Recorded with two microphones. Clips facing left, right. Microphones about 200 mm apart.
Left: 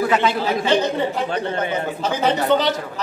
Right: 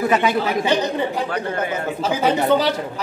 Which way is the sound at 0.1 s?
15° right (ahead or behind).